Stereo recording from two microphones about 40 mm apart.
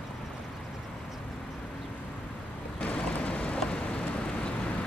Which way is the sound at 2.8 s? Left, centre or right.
Left.